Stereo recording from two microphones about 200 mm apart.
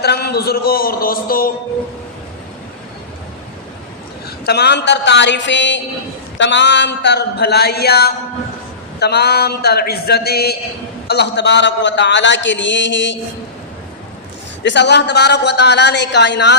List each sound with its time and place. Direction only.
0.0 s a man's voice: 55° left (ahead or behind)
4.4 s a man's voice: 55° left (ahead or behind)
14.6 s a man's voice: 60° left (ahead or behind)